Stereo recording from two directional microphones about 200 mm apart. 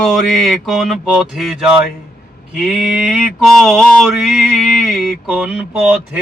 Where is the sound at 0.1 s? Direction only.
Centre (ahead or behind).